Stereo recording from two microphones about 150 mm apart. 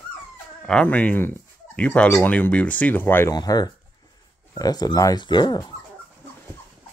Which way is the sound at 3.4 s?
25° left (ahead or behind).